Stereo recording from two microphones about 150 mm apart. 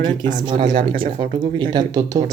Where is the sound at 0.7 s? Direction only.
70° right (ahead or behind).